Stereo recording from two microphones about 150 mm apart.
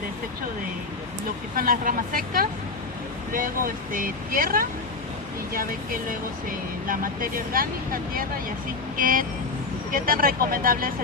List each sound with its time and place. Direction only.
1.5 s speech: 70° right (ahead or behind)
3.9 s speech: 70° right (ahead or behind)
9.0 s speech: 65° right (ahead or behind)